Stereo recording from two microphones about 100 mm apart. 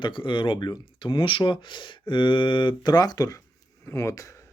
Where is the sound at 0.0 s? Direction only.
55° left (ahead or behind).